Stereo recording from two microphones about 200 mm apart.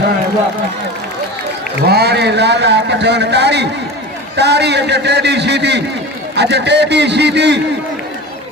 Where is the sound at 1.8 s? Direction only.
55° right (ahead or behind).